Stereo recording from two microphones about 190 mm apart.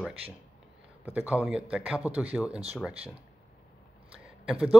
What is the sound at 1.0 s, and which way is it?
Speech, 10° right (ahead or behind).